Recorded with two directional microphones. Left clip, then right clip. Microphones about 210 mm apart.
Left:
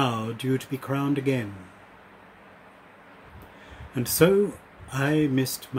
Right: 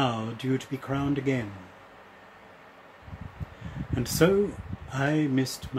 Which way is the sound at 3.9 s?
10° left (ahead or behind).